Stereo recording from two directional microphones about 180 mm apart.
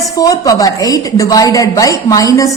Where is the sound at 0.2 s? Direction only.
20° left (ahead or behind).